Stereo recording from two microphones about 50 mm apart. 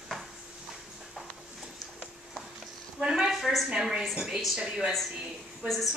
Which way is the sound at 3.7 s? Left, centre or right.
Centre.